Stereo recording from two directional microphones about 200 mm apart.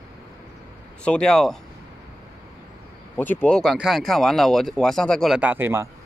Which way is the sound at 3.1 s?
10° left (ahead or behind).